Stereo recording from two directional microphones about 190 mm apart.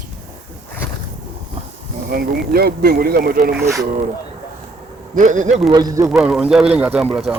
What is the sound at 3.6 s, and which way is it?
Speech, 15° right (ahead or behind).